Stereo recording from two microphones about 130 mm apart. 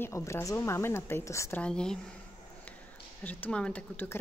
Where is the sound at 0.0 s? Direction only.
20° left (ahead or behind).